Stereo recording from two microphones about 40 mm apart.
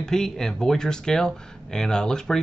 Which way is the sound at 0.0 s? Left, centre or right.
Centre.